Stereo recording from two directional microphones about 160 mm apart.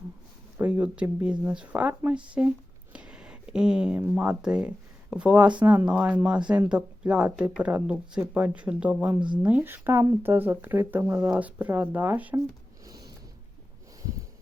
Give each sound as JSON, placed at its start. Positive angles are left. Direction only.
{"t": 0.6, "sound": "speech", "side_deg": -10}
{"t": 2.9, "sound": "a sound", "side_deg": -5}
{"t": 4.1, "sound": "speech", "side_deg": -5}
{"t": 9.2, "sound": "speech", "side_deg": -30}
{"t": 9.5, "sound": "speech", "side_deg": -10}
{"t": 12.8, "sound": "a sound", "side_deg": -25}